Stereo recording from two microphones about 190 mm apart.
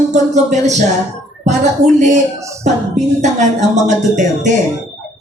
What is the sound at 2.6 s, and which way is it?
A man's voice, 35° right (ahead or behind).